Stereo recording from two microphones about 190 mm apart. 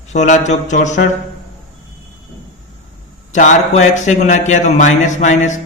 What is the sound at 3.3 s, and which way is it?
Speech, 40° left (ahead or behind).